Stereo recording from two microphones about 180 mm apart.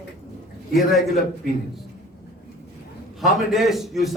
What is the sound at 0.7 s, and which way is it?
Speech, centre (ahead or behind).